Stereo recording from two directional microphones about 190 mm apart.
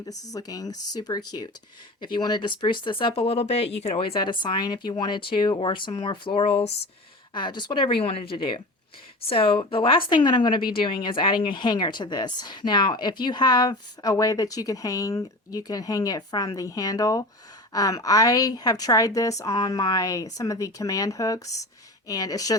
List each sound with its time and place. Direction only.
0.3 s a woman's voice: 20° left (ahead or behind)